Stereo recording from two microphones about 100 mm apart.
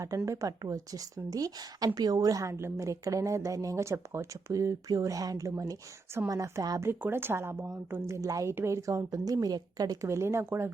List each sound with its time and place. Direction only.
0.3 s a woman's voice: 35° right (ahead or behind)
6.8 s a woman's voice: 20° right (ahead or behind)